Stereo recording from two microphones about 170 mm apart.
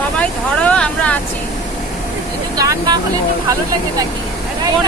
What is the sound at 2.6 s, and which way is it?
Speech, 20° right (ahead or behind).